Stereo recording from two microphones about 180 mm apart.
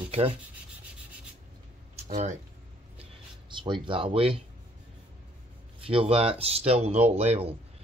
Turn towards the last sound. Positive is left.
turn(degrees=-35)  # may be behind; listen again after turning